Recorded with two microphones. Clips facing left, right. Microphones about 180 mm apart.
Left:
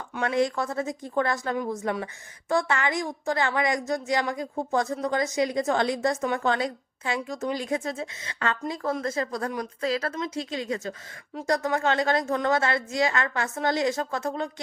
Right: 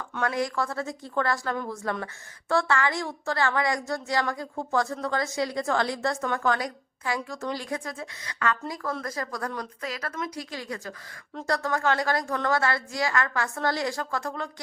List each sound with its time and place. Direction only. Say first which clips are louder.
0.2 s a woman's voice: left 3 dB; 25° left (ahead or behind)